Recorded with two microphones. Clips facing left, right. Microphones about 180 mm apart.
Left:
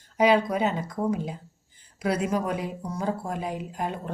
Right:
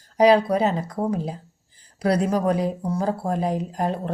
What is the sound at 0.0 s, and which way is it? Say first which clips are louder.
Speech: right 5 dB; 35° right (ahead or behind).